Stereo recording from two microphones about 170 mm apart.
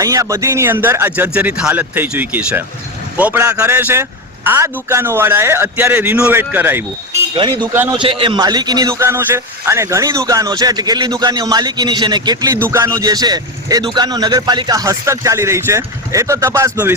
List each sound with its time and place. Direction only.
0.0 s a man's voice: 20° right (ahead or behind)
7.3 s a man's voice: 25° right (ahead or behind)